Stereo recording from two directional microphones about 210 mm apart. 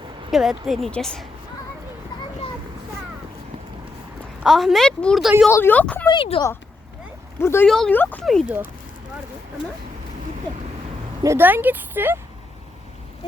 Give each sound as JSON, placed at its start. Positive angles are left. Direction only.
{"t": 0.3, "sound": "a woman's voice", "side_deg": 0}
{"t": 4.4, "sound": "a woman's voice", "side_deg": 0}
{"t": 6.1, "sound": "speech", "side_deg": 25}
{"t": 7.3, "sound": "a woman's voice", "side_deg": 10}
{"t": 11.2, "sound": "speech", "side_deg": -10}